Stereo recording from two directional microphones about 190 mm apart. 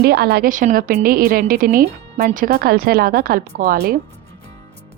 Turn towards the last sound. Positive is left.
turn(degrees=-55)  # may be behind; listen again after turning